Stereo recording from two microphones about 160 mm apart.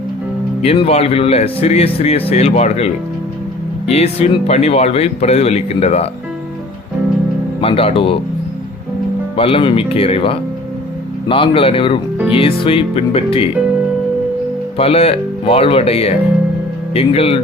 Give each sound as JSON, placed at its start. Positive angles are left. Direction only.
{"t": 0.6, "sound": "speech", "side_deg": 40}
{"t": 7.6, "sound": "speech", "side_deg": 35}
{"t": 9.3, "sound": "speech", "side_deg": 35}
{"t": 14.8, "sound": "speech", "side_deg": 35}